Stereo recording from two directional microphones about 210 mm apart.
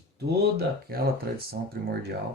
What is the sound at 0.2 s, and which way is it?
Speech, 50° right (ahead or behind).